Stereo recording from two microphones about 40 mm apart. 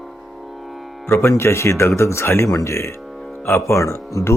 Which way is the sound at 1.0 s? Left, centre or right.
Left.